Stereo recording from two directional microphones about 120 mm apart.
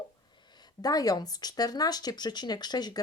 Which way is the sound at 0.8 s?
30° left (ahead or behind).